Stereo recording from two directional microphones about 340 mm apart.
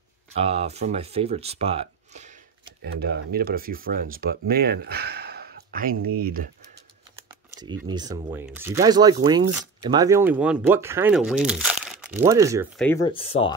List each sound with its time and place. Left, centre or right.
0.4 s speech: centre
7.2 s typing: centre
7.9 s speech: centre
12.8 s speech: centre